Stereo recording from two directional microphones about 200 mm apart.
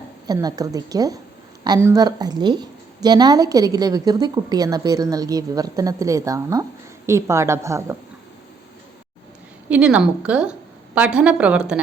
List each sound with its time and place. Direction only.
0.3 s a woman's voice: 20° right (ahead or behind)
9.6 s a woman's voice: 5° right (ahead or behind)